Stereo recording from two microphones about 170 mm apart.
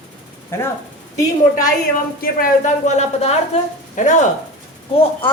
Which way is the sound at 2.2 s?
50° left (ahead or behind).